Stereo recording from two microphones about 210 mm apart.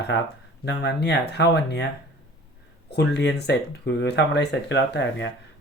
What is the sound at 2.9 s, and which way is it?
Speech, 55° left (ahead or behind).